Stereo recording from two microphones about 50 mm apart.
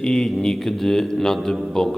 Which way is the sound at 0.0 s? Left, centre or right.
Centre.